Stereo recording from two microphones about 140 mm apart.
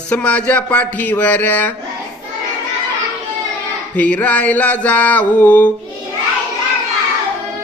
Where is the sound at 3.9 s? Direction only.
10° left (ahead or behind).